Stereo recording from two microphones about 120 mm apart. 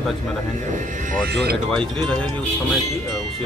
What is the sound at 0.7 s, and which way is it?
Speech, 90° right.